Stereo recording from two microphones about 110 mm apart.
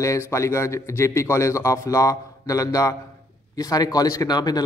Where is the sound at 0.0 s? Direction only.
25° left (ahead or behind).